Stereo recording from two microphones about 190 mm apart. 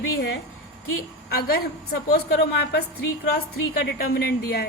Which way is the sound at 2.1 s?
55° left (ahead or behind).